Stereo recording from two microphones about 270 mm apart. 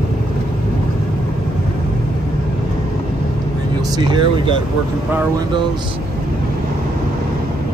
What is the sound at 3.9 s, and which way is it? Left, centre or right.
Speech, centre.